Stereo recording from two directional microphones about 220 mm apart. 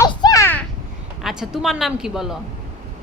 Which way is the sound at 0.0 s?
15° left (ahead or behind).